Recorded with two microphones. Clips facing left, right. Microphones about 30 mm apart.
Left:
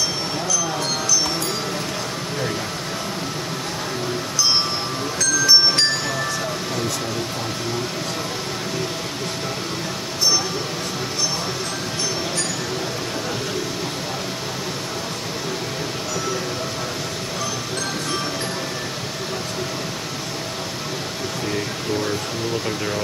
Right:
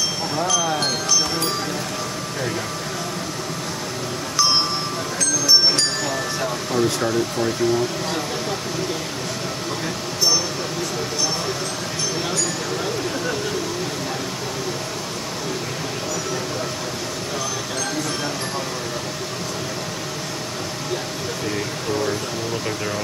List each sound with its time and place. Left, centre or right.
0.7 s music: right
6.4 s air conditioning: centre
21.5 s a sound: centre
22.7 s speech: centre